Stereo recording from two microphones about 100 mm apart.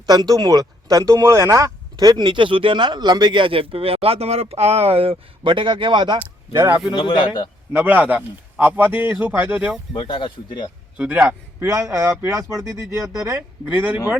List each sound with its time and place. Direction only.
0.0 s speech: 40° right (ahead or behind)
6.5 s speech: 30° right (ahead or behind)
6.9 s speech: 60° left (ahead or behind)
7.7 s a man's voice: 20° right (ahead or behind)
9.9 s speech: 60° left (ahead or behind)
10.9 s a man's voice: 15° right (ahead or behind)
11.7 s speech: 30° right (ahead or behind)
13.7 s a man's voice: 15° right (ahead or behind)